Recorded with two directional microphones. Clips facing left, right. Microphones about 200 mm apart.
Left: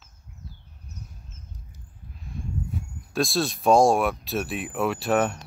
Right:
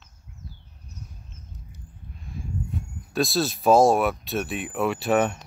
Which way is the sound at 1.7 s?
Centre (ahead or behind).